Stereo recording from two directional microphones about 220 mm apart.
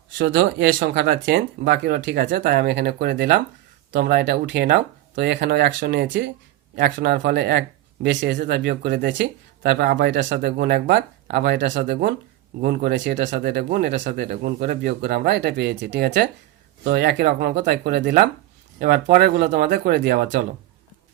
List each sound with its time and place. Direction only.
0.2 s speech: 45° right (ahead or behind)